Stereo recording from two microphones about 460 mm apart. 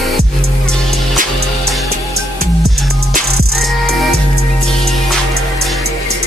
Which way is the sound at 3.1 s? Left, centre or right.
Right.